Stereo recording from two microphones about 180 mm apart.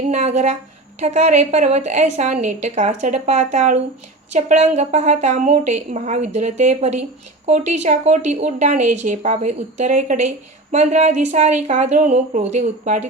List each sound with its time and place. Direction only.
0.1 s speech: 40° right (ahead or behind)